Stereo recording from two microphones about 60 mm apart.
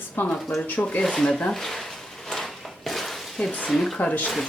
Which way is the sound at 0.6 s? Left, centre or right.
Left.